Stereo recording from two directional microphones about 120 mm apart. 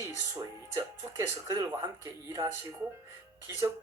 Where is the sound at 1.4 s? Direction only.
30° right (ahead or behind).